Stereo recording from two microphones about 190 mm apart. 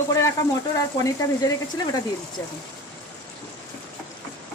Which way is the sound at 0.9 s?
20° left (ahead or behind).